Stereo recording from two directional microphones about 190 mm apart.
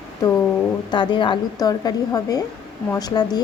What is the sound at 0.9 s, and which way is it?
A woman's voice, 25° left (ahead or behind).